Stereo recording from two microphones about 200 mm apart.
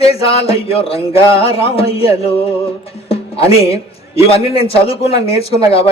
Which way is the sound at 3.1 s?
30° left (ahead or behind).